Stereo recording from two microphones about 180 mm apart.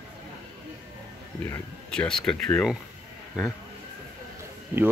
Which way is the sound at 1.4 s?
10° left (ahead or behind).